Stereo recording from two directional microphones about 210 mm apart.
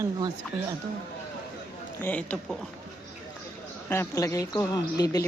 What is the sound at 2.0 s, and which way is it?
Speech, 5° left (ahead or behind).